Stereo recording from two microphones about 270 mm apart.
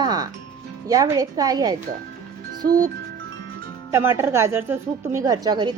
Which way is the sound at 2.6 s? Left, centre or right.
Right.